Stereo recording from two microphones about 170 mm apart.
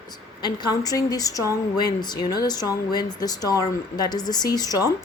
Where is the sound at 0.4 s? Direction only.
25° left (ahead or behind).